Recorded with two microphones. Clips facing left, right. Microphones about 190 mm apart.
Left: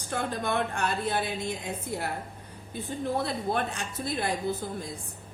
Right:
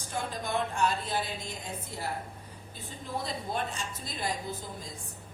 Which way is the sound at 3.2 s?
65° left (ahead or behind).